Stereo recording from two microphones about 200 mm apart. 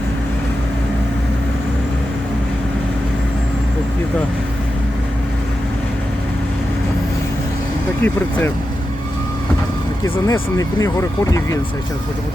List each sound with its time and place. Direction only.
8.0 s speech: 10° left (ahead or behind)
10.0 s speech: 15° left (ahead or behind)